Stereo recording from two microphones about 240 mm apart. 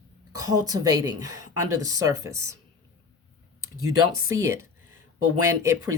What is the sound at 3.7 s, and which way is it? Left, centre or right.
Speech, right.